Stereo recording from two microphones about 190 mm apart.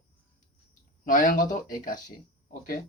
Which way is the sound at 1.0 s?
45° left (ahead or behind).